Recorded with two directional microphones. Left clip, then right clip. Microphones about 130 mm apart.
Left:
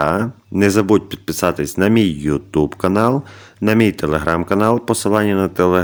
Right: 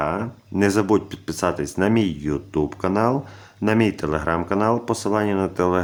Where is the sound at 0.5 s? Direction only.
25° left (ahead or behind).